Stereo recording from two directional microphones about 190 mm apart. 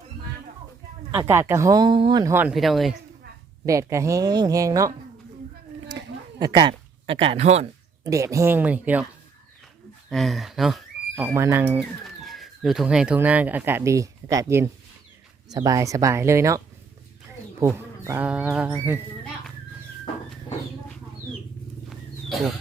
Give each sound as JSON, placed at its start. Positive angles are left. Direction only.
{"t": 1.1, "sound": "speech", "side_deg": -15}
{"t": 3.7, "sound": "speech", "side_deg": -15}
{"t": 6.4, "sound": "speech", "side_deg": -25}
{"t": 8.0, "sound": "speech", "side_deg": -15}
{"t": 10.1, "sound": "speech", "side_deg": 0}
{"t": 11.3, "sound": "speech", "side_deg": -15}
{"t": 12.0, "sound": "speech", "side_deg": 0}
{"t": 17.6, "sound": "speech", "side_deg": -15}
{"t": 21.8, "sound": "wild animals", "side_deg": 0}